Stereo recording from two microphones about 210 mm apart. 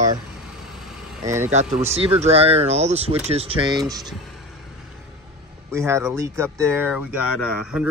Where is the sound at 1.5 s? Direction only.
30° right (ahead or behind).